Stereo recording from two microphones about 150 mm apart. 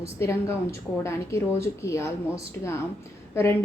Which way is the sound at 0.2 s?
20° left (ahead or behind).